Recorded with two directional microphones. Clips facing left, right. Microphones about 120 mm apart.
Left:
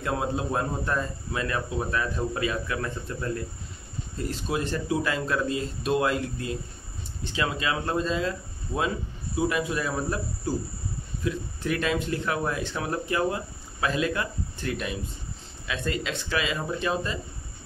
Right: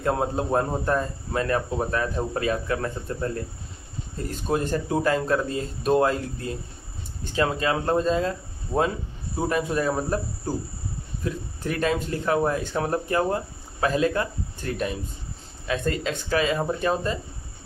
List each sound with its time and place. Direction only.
0.0 s speech: 45° right (ahead or behind)
4.3 s speech: 45° right (ahead or behind)